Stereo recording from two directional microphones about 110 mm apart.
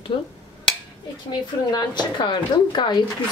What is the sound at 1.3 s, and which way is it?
Speech, 40° left (ahead or behind).